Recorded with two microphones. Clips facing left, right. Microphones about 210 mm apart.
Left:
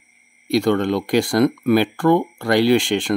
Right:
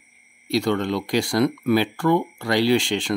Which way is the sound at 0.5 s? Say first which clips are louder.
Left 4 dB; 55° left (ahead or behind).